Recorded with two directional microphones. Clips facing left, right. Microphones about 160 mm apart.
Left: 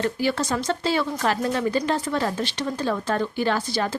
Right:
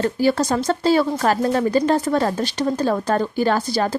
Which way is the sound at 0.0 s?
40° right (ahead or behind).